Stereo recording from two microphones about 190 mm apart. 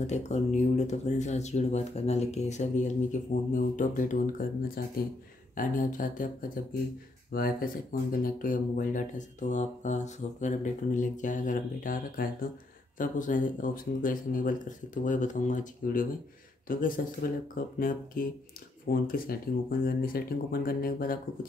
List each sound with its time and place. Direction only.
0.0 s speech: 35° left (ahead or behind)
7.3 s speech: 50° left (ahead or behind)